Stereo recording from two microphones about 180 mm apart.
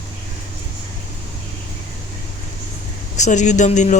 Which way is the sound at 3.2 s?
40° left (ahead or behind).